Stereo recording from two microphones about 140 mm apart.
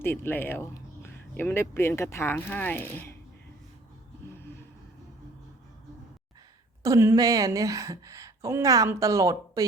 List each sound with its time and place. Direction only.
0.0 s speech: 15° left (ahead or behind)
6.8 s a woman's voice: 20° right (ahead or behind)